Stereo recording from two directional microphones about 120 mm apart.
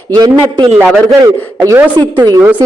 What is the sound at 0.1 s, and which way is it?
Speech, 35° right (ahead or behind).